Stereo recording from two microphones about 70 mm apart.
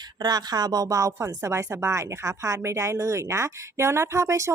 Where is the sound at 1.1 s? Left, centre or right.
Right.